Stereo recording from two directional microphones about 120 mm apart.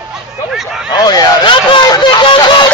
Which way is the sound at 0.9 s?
35° left (ahead or behind).